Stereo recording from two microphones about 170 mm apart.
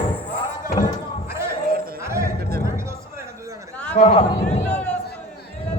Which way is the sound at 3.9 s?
45° left (ahead or behind).